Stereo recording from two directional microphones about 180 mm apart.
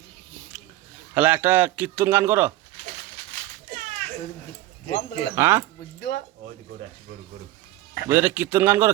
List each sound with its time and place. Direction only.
1.1 s a man's voice: 10° right (ahead or behind)
4.9 s speech: 65° left (ahead or behind)
5.3 s a man's voice: 15° right (ahead or behind)
6.0 s speech: 75° left (ahead or behind)
8.0 s a man's voice: 10° right (ahead or behind)